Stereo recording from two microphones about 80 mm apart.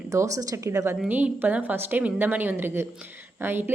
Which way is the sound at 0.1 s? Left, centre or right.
Right.